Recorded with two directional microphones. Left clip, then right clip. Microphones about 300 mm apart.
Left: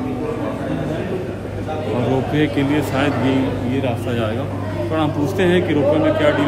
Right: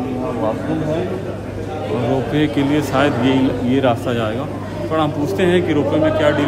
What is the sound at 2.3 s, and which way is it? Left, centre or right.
A man's voice, centre.